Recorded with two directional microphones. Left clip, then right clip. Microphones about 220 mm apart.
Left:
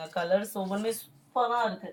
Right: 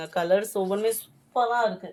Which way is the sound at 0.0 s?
55° right (ahead or behind).